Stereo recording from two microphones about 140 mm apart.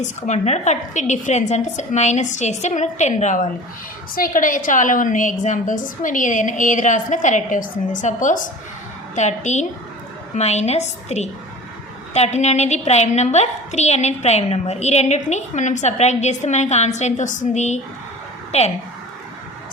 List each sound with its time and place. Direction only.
0.0 s a woman's voice: 55° left (ahead or behind)
4.1 s a woman's voice: 80° left; by 18.7 s 50° left (ahead or behind)